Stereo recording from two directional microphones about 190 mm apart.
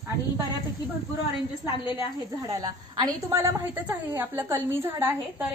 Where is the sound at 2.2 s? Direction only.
20° right (ahead or behind).